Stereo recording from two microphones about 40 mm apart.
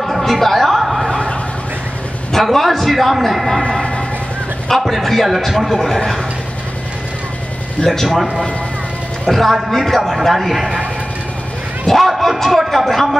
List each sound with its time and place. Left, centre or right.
0.2 s a sound: centre
2.5 s a man's voice: centre
4.6 s a man's voice: centre
5.9 s speech: centre
7.8 s a man's voice: centre
11.9 s a man's voice: centre